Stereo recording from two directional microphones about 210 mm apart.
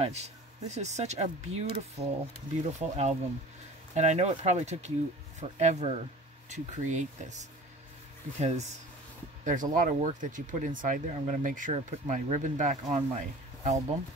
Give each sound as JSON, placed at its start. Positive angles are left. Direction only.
{"t": 0.0, "sound": "speech", "side_deg": -30}